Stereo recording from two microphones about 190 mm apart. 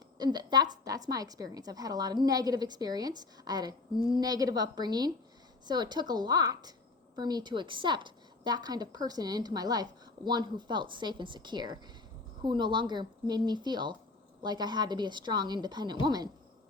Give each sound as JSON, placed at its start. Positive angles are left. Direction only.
{"t": 0.2, "sound": "a woman's voice", "side_deg": -20}